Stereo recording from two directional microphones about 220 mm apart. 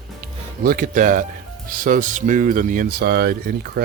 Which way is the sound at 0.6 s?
40° right (ahead or behind).